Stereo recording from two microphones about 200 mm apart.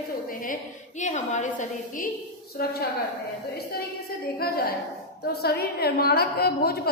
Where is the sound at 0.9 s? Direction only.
35° left (ahead or behind).